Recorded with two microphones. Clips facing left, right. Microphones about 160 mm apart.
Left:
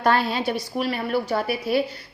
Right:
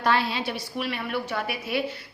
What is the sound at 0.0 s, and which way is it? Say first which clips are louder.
A woman's voice: left 4 dB; 45° left (ahead or behind).